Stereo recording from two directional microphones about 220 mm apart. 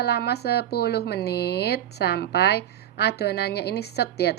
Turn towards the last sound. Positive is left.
turn(degrees=50)  # may be behind; listen again after turning